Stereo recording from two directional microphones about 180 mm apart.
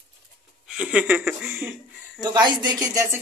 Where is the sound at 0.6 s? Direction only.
5° right (ahead or behind).